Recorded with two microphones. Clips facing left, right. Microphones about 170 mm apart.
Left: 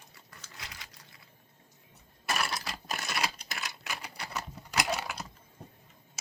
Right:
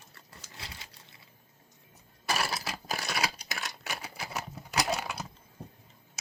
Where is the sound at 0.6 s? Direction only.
30° right (ahead or behind).